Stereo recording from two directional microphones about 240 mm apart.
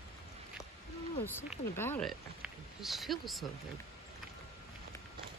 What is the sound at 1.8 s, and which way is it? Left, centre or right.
Speech, centre.